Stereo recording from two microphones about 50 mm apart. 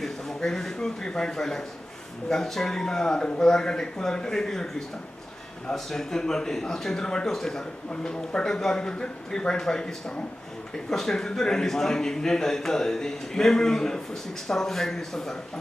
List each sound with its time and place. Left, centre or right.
0.0 s speech: centre